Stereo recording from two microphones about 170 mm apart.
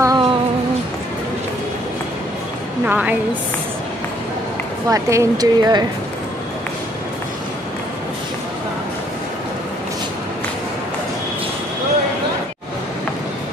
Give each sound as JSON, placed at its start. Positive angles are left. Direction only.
{"t": 0.0, "sound": "a sound", "side_deg": -20}
{"t": 2.9, "sound": "a woman's voice", "side_deg": -10}
{"t": 4.8, "sound": "speech", "side_deg": -20}